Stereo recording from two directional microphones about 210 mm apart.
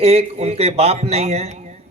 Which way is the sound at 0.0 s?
30° right (ahead or behind).